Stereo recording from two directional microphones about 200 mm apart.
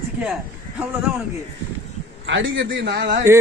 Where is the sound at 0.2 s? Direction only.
5° right (ahead or behind).